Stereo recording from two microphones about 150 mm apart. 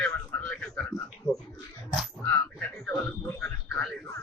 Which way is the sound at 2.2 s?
10° left (ahead or behind).